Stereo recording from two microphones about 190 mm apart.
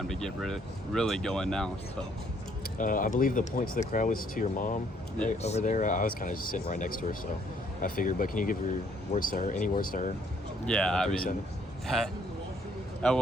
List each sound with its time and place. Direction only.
0.1 s speech: centre (ahead or behind)
2.7 s speech: 45° left (ahead or behind)
10.7 s speech: 5° left (ahead or behind)